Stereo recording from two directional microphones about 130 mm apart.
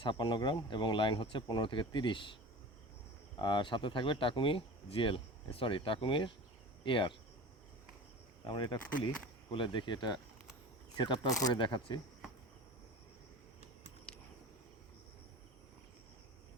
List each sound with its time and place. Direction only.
0.0 s speech: 35° left (ahead or behind)
3.3 s speech: 35° left (ahead or behind)
8.4 s speech: 35° left (ahead or behind)
14.1 s a sound: 10° left (ahead or behind)